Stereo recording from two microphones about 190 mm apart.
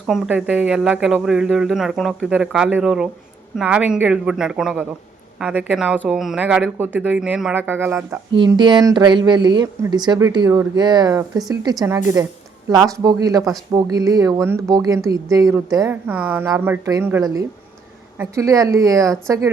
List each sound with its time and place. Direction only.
0.0 s speech: 5° right (ahead or behind)
8.4 s speech: 25° right (ahead or behind)